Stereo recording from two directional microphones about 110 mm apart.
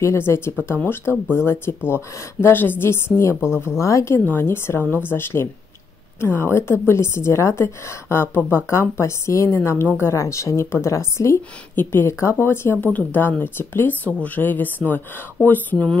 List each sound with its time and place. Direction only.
0.0 s a woman's voice: 25° left (ahead or behind)
3.3 s speech: 5° right (ahead or behind)
3.8 s a woman's voice: 25° left (ahead or behind)